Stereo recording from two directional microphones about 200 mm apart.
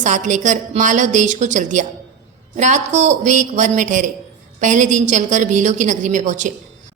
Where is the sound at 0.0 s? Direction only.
40° right (ahead or behind).